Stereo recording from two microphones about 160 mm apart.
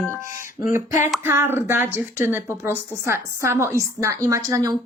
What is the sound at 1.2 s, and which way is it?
A woman's voice, 15° right (ahead or behind).